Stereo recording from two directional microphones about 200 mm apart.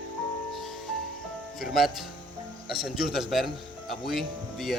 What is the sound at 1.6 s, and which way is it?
Speech, centre (ahead or behind).